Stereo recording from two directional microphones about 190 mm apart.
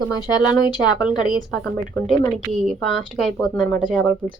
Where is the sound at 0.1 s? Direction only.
20° left (ahead or behind).